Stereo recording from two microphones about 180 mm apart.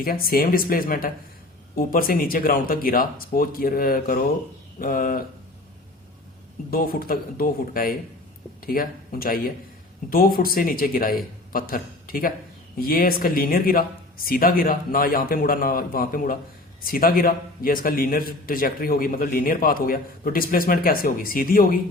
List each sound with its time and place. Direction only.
0.0 s a man's voice: 55° left (ahead or behind)
6.7 s a man's voice: 55° left (ahead or behind)